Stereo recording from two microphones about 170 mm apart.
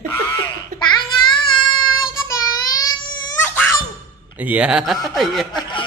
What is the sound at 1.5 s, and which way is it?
Child singing, 30° left (ahead or behind).